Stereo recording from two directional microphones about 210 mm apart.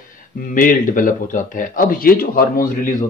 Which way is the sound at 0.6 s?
40° left (ahead or behind).